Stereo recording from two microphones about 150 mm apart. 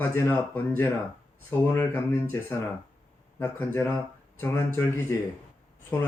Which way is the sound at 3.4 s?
15° left (ahead or behind).